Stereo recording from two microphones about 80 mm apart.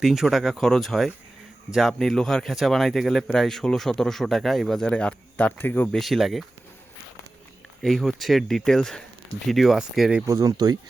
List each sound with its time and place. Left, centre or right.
0.0 s speech: centre; by 5.9 s left
5.9 s speech: centre
7.8 s speech: centre
10.2 s speech: right